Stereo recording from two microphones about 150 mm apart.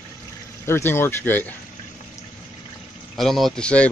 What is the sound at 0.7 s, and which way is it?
Speech, 15° left (ahead or behind).